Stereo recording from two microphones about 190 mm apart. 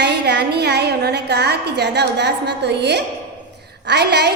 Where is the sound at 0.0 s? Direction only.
60° right (ahead or behind).